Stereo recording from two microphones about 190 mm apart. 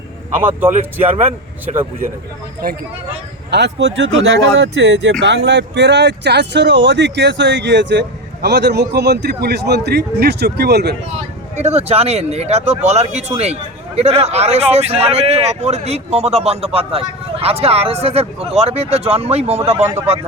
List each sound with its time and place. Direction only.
2.6 s speech: 50° right (ahead or behind)
3.5 s speech: 65° right (ahead or behind)
11.2 s speech: 35° right (ahead or behind)